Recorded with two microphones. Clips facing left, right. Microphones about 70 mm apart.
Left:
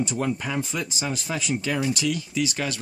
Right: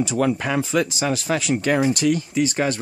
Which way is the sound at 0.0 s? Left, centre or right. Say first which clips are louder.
Right 5 dB; right.